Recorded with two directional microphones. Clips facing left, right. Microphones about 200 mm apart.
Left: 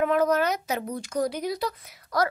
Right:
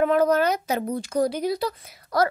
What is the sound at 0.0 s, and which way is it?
A child's voice, 35° right (ahead or behind).